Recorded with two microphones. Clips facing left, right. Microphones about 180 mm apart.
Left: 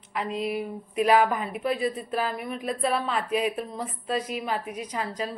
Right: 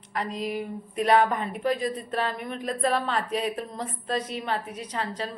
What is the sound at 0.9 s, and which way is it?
A woman's voice, 5° left (ahead or behind).